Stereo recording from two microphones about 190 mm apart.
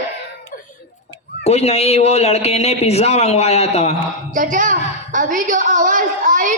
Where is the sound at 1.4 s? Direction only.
35° left (ahead or behind).